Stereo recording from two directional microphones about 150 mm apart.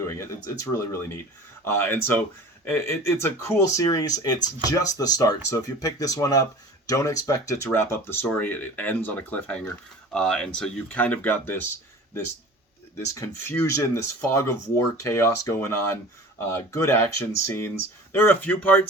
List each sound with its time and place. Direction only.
0.0 s speech: 20° left (ahead or behind)
13.0 s speech: 20° left (ahead or behind)
18.1 s speech: 15° left (ahead or behind)